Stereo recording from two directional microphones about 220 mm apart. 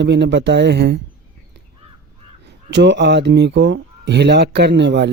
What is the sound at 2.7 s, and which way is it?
Speech, 55° right (ahead or behind).